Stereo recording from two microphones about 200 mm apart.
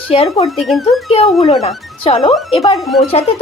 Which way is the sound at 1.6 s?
30° left (ahead or behind).